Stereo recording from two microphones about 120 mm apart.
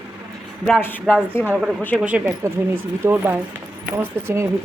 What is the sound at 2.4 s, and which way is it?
Speech, 20° right (ahead or behind).